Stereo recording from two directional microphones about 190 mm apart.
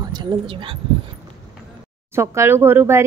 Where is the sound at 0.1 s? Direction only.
20° right (ahead or behind).